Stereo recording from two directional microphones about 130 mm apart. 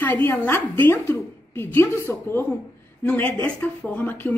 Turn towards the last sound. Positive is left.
turn(degrees=15)  # may be behind; listen again after turning